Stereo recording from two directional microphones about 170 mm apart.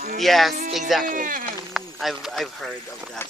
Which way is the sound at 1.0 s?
50° right (ahead or behind).